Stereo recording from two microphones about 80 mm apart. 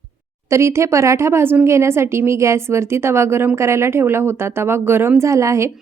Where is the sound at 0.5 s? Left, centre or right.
Right.